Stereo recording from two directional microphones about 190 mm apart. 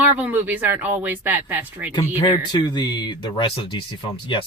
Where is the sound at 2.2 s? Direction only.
20° left (ahead or behind).